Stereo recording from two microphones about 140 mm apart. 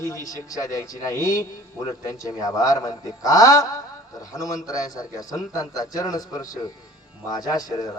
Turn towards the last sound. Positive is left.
turn(degrees=25)  # may be behind; listen again after turning